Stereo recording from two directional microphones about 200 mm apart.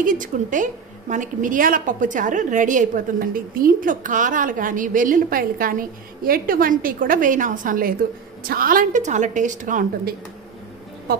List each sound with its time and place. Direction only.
0.0 s a woman's voice: 40° right (ahead or behind)